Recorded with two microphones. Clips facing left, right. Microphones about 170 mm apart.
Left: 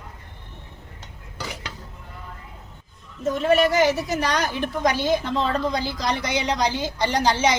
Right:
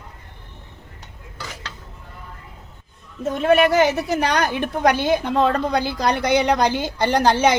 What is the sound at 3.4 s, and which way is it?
A woman's voice, 60° right (ahead or behind).